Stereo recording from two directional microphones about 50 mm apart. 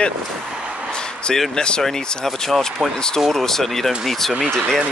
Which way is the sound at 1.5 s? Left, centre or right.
Centre.